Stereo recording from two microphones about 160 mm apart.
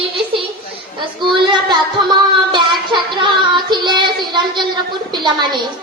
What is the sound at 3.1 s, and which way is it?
Child singing, 30° right (ahead or behind).